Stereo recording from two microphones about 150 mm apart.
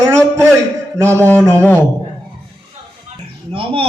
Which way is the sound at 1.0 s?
20° right (ahead or behind).